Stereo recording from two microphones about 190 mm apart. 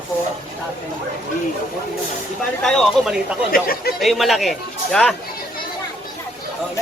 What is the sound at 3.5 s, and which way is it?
Speech, 50° left (ahead or behind).